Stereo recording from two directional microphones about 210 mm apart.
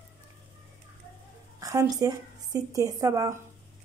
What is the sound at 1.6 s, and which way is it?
A woman's voice, 15° right (ahead or behind).